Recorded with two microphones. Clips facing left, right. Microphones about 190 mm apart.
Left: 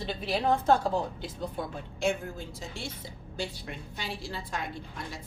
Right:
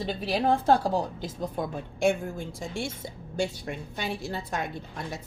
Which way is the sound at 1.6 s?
45° right (ahead or behind).